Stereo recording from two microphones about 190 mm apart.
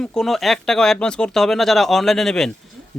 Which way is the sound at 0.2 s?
Centre (ahead or behind).